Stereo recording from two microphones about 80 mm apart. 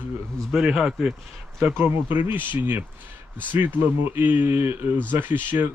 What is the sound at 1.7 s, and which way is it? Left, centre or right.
Speech, right.